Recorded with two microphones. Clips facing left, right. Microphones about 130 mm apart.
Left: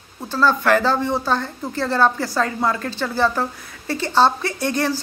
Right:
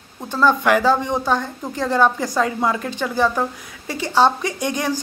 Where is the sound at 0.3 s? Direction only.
15° right (ahead or behind).